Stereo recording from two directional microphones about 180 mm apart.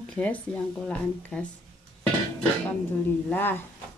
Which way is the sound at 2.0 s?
5° left (ahead or behind).